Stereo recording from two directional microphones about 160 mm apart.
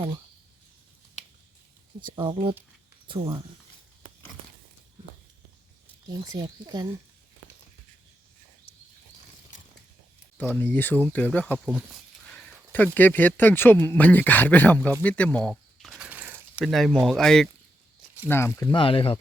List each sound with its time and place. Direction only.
2.0 s speech: 30° right (ahead or behind)
6.1 s speech: 25° right (ahead or behind)
10.3 s speech: 10° left (ahead or behind)
15.0 s mechanisms: 10° left (ahead or behind); by 16.6 s 10° right (ahead or behind)
16.6 s speech: centre (ahead or behind)
18.3 s speech: 15° left (ahead or behind)
18.7 s speech: 35° left (ahead or behind)